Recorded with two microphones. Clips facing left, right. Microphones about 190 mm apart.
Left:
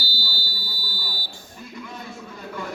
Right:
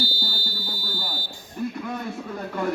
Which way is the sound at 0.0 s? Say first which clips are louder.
Right 6 dB; 50° right (ahead or behind).